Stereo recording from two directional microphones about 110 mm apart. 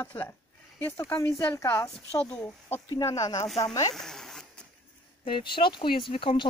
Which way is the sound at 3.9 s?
5° left (ahead or behind).